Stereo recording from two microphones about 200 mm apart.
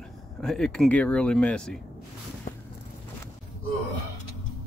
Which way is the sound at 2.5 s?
45° left (ahead or behind).